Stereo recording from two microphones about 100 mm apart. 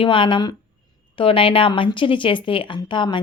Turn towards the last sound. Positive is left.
turn(degrees=50)  # may be behind; listen again after turning